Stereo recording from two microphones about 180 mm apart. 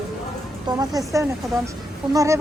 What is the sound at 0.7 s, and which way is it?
A woman's voice, 20° right (ahead or behind).